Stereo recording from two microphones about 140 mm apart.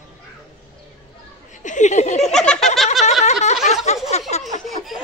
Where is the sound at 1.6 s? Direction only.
60° left (ahead or behind).